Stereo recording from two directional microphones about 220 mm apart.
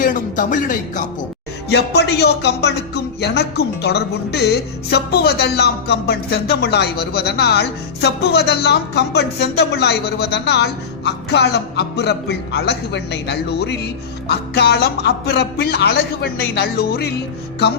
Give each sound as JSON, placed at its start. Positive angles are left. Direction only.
{"t": 0.0, "sound": "speech", "side_deg": 35}
{"t": 1.7, "sound": "speech", "side_deg": 50}